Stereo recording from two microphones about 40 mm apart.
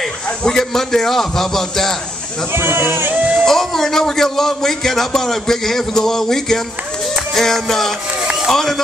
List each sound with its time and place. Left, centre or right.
0.5 s a man's voice: centre
2.5 s speech: right
2.8 s speech: right
3.4 s a man's voice: centre